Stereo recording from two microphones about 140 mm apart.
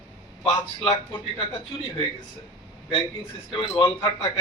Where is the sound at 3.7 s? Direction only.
40° left (ahead or behind).